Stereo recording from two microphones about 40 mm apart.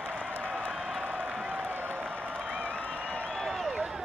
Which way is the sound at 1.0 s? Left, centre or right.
Right.